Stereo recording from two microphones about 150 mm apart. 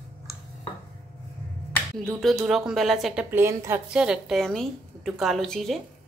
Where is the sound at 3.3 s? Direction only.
15° right (ahead or behind).